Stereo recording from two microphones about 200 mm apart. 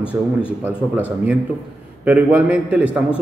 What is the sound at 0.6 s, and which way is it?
Speech, 5° right (ahead or behind).